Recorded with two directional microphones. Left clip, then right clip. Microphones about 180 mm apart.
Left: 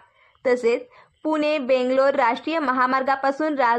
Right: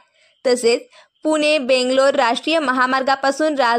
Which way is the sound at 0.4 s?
25° right (ahead or behind).